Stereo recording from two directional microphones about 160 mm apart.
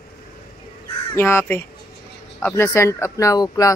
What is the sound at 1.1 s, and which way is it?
Speech, 15° left (ahead or behind).